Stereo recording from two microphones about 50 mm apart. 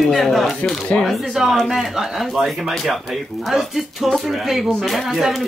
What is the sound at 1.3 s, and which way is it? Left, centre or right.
Speech, centre.